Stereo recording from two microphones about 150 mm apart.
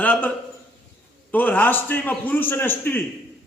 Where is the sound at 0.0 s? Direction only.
10° left (ahead or behind).